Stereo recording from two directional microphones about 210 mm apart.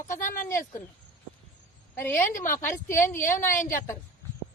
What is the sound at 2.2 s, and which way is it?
A woman's voice, 40° left (ahead or behind).